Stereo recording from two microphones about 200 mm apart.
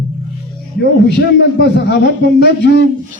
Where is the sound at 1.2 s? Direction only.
60° left (ahead or behind).